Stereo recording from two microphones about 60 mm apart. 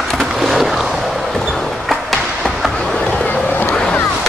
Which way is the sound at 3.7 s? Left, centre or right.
Centre.